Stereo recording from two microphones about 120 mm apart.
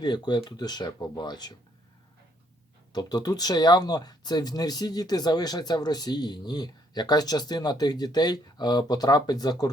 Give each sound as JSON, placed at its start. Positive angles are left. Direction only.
{"t": 0.0, "sound": "speech", "side_deg": 35}
{"t": 2.9, "sound": "speech", "side_deg": 35}